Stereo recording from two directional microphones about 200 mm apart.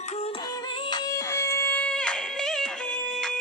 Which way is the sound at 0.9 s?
20° left (ahead or behind).